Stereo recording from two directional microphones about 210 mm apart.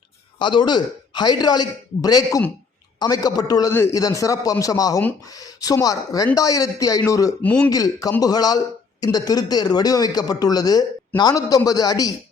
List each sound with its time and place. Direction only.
0.3 s a man's voice: 20° left (ahead or behind)